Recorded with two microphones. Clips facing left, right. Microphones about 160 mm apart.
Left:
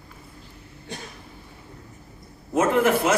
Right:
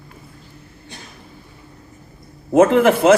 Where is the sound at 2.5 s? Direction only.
90° right.